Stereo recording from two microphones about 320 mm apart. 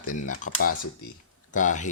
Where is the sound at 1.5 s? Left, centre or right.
Left.